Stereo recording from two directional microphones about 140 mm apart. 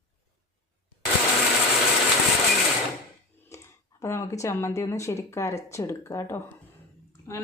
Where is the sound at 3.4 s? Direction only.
20° left (ahead or behind).